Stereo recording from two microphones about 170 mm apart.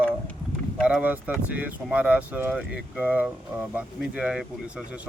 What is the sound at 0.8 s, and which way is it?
Speech, 5° right (ahead or behind).